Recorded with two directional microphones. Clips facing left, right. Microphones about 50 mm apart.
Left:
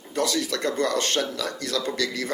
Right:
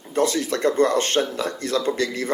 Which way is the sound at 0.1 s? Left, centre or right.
Right.